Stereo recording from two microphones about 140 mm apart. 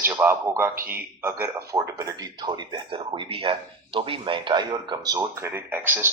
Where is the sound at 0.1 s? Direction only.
15° right (ahead or behind).